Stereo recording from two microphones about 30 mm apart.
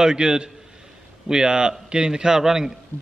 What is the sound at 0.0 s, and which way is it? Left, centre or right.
A man's voice, right.